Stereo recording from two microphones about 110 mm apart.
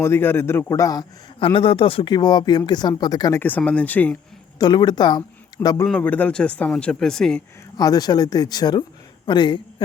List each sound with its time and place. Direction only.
0.0 s a man's voice: 20° left (ahead or behind)
1.4 s speech: 55° left (ahead or behind)
2.1 s speech: 40° left (ahead or behind)
3.6 s speech: 15° left (ahead or behind)
4.6 s speech: 40° left (ahead or behind)
5.6 s speech: 15° left (ahead or behind)
7.8 s a man's voice: 35° left (ahead or behind)